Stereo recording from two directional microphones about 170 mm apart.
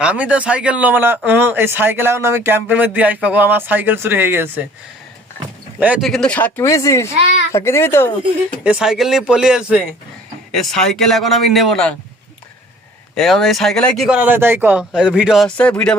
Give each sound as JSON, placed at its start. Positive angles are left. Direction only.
{"t": 0.0, "sound": "speech", "side_deg": -5}
{"t": 5.8, "sound": "speech", "side_deg": -10}
{"t": 6.1, "sound": "speech", "side_deg": 5}
{"t": 8.6, "sound": "speech", "side_deg": -5}
{"t": 13.1, "sound": "speech", "side_deg": 0}
{"t": 14.2, "sound": "speech", "side_deg": -10}